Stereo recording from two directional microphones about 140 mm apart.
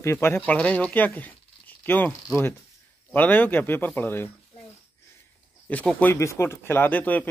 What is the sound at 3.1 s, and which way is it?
Speech, 15° left (ahead or behind).